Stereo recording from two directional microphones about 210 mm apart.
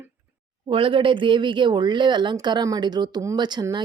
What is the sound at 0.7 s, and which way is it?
Speech, 25° right (ahead or behind).